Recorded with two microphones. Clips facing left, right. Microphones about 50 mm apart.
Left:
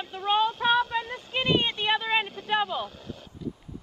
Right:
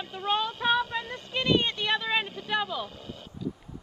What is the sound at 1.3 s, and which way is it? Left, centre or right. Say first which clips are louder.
Speech: even; centre.